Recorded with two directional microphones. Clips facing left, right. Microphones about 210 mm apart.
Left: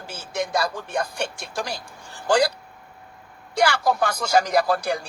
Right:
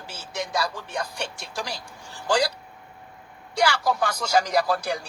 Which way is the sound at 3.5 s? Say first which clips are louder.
Left 2 dB; 50° left (ahead or behind).